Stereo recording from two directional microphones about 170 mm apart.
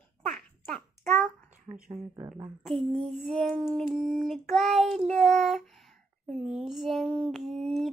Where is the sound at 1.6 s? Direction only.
40° right (ahead or behind).